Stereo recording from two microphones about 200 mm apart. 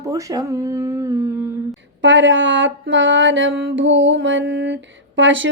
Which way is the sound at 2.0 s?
65° right (ahead or behind).